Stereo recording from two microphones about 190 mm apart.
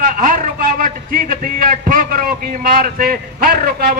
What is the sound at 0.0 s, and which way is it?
A man's voice, 45° right (ahead or behind).